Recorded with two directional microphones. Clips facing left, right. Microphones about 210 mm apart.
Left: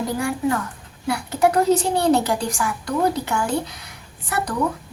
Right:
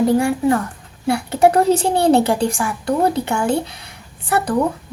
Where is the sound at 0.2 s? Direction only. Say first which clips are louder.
Right 6 dB; 30° right (ahead or behind).